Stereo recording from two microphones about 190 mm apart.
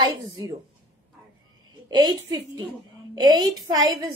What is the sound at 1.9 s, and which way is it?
A woman's voice, 20° right (ahead or behind).